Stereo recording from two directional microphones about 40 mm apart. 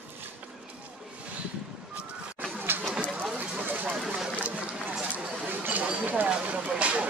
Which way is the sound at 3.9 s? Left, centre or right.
Centre.